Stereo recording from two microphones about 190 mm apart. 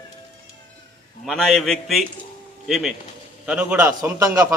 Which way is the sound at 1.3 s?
Centre (ahead or behind).